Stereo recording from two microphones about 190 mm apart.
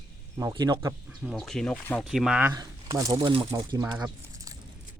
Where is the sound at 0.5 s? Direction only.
25° right (ahead or behind).